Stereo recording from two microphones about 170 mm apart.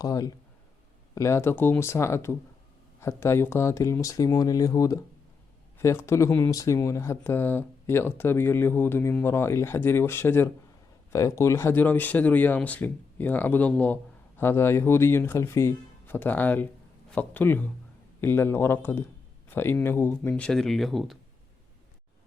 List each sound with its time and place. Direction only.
0.0 s speech: 20° left (ahead or behind); by 21.2 s centre (ahead or behind)